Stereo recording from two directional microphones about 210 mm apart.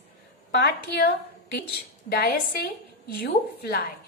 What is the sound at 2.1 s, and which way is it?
A woman's voice, 45° left (ahead or behind).